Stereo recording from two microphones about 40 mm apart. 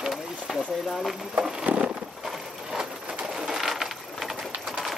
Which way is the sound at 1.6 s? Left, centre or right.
Right.